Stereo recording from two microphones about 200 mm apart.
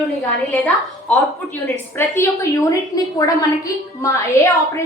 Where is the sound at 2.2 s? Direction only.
15° left (ahead or behind).